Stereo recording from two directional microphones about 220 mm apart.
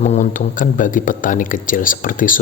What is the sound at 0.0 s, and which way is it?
Speech, 35° left (ahead or behind).